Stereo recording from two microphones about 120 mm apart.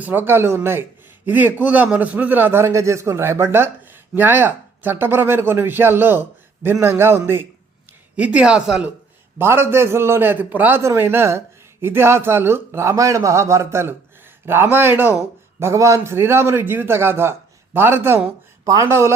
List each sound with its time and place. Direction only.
0.0 s a man's voice: 15° right (ahead or behind)
9.4 s a man's voice: 20° right (ahead or behind)